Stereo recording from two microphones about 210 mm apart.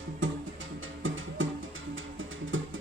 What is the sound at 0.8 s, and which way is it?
Music, 70° right (ahead or behind).